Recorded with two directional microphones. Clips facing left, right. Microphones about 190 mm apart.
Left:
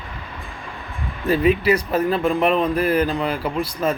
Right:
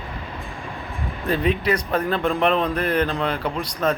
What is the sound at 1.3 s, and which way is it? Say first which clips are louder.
A man's voice: left 4 dB; 5° left (ahead or behind).